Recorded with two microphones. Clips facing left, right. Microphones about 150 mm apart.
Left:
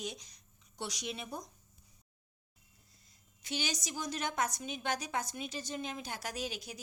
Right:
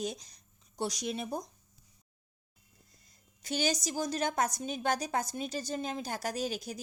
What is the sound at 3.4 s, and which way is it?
A woman's voice, 40° right (ahead or behind).